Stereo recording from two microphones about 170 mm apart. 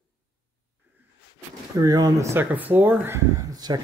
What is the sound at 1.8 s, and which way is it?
Speech, 20° right (ahead or behind).